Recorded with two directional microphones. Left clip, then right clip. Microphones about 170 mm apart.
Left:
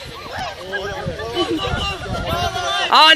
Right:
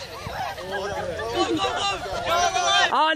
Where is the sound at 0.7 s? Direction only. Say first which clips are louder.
Left 3 dB; 25° left (ahead or behind).